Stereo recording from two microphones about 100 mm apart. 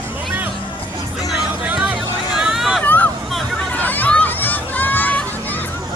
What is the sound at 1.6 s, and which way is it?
Hubbub, 15° right (ahead or behind).